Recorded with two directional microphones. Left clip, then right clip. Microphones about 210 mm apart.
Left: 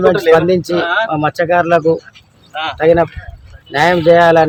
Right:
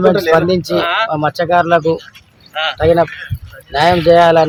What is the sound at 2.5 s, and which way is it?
Speech, 45° left (ahead or behind).